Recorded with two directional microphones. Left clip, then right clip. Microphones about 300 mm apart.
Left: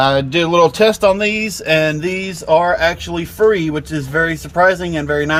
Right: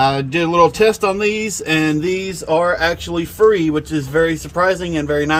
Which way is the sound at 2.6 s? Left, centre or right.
Left.